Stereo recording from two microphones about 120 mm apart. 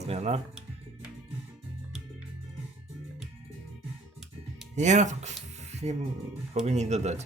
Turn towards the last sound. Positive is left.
turn(degrees=-70)  # may be behind; listen again after turning